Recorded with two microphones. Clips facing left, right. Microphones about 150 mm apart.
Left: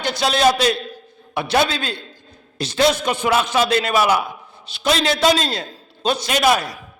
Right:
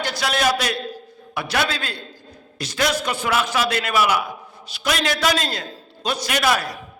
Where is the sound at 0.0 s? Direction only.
25° left (ahead or behind).